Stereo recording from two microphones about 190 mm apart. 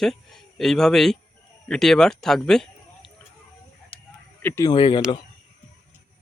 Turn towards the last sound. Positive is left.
turn(degrees=25)  # may be behind; listen again after turning